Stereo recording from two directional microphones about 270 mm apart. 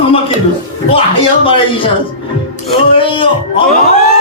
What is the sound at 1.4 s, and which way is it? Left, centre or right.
Speech, centre.